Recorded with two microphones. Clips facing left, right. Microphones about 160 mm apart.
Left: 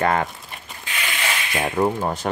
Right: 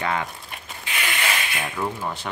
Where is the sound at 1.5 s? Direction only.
45° left (ahead or behind).